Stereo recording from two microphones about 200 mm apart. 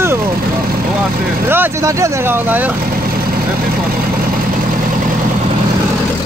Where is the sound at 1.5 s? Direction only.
15° right (ahead or behind).